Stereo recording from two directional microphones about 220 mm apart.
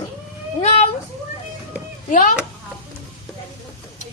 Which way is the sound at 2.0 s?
35° left (ahead or behind).